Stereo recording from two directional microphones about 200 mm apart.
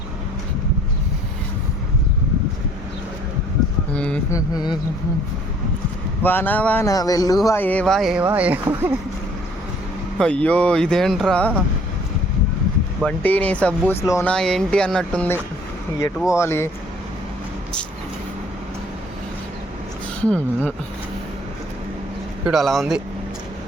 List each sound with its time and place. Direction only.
3.9 s speech: 5° left (ahead or behind)
4.4 s a sound: 20° left (ahead or behind)
6.2 s speech: 10° left (ahead or behind); by 8.9 s 10° right (ahead or behind)
10.2 s speech: 5° left (ahead or behind)
13.0 s speech: 5° left (ahead or behind)
14.3 s speech: 5° left (ahead or behind)
20.2 s speech: 5° left (ahead or behind)
22.4 s speech: centre (ahead or behind)